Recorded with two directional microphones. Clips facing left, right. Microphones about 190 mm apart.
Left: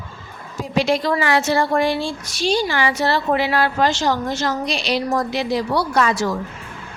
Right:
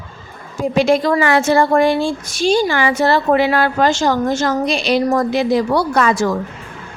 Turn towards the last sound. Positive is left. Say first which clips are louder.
# right 3 dB
turn(degrees=-50)  # may be behind; listen again after turning